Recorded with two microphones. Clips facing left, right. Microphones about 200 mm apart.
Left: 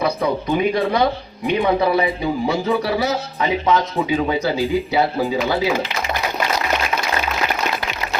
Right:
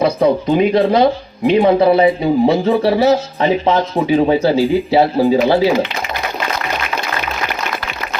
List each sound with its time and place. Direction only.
0.0 s a man's voice: 30° right (ahead or behind)